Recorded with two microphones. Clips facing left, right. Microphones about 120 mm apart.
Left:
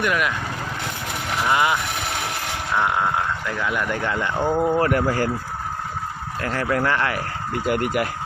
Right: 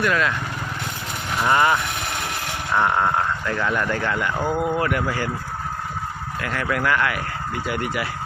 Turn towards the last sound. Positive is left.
turn(degrees=50)  # may be behind; listen again after turning